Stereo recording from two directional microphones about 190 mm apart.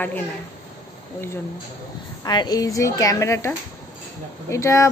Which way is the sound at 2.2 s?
20° left (ahead or behind).